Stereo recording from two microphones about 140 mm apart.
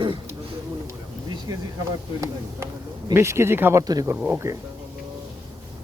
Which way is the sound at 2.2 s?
20° right (ahead or behind).